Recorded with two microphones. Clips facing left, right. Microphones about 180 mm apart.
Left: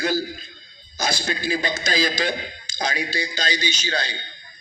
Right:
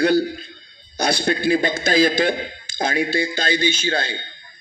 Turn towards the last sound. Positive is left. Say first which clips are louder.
# right 5 dB
turn(degrees=-55)  # may be behind; listen again after turning